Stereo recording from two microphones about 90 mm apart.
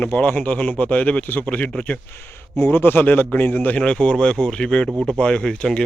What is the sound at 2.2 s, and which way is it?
A man's voice, 25° left (ahead or behind).